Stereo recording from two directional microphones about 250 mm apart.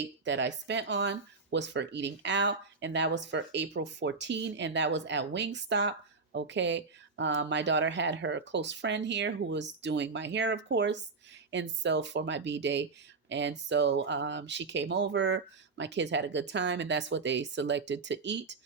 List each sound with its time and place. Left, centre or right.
0.3 s speech: right